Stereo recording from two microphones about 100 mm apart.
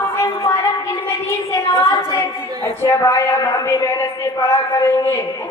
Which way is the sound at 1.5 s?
30° left (ahead or behind).